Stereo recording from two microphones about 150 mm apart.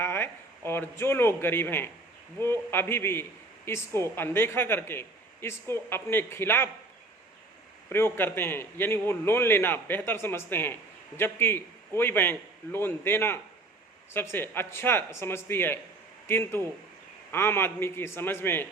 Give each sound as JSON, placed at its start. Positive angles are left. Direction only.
{"t": 0.0, "sound": "a woman's voice", "side_deg": 15}
{"t": 7.9, "sound": "a woman's voice", "side_deg": 15}